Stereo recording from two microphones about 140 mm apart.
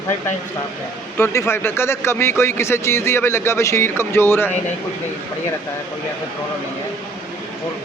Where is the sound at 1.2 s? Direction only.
20° left (ahead or behind).